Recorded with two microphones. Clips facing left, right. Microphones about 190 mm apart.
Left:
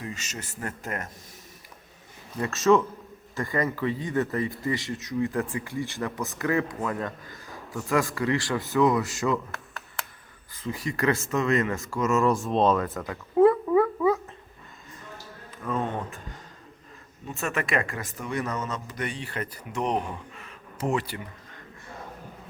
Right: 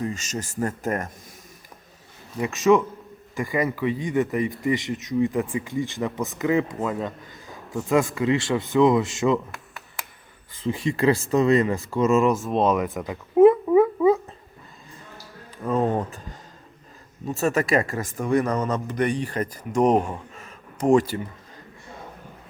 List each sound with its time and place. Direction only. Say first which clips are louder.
0.0 s speech: right 8 dB; 45° right (ahead or behind)
2.4 s speech: right 2 dB; 15° right (ahead or behind)
10.6 s speech: right 6 dB; 25° right (ahead or behind)
12.4 s speech: right 1 dB; 5° right (ahead or behind)
12.7 s gargling: right 3 dB; 15° right (ahead or behind)
15.6 s speech: right 7 dB; 35° right (ahead or behind)
17.2 s speech: right 7 dB; 35° right (ahead or behind)